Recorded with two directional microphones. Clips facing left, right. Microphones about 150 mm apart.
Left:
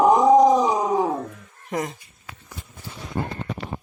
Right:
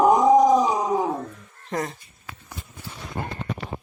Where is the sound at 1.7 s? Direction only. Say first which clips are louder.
Left 1 dB; 15° left (ahead or behind).